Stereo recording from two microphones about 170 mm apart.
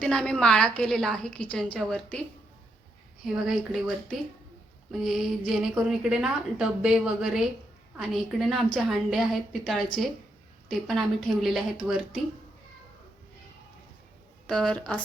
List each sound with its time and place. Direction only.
0.0 s a woman's voice: 5° left (ahead or behind)
3.4 s a woman's voice: 5° right (ahead or behind)
14.4 s a woman's voice: 5° left (ahead or behind)